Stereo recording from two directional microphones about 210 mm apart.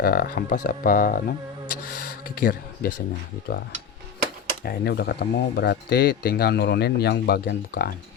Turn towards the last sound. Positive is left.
turn(degrees=45)  # may be behind; listen again after turning